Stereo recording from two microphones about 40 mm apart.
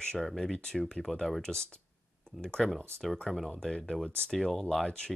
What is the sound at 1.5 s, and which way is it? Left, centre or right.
Speech, centre.